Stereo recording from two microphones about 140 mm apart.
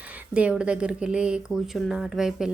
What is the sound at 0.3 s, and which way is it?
A woman's voice, 10° right (ahead or behind).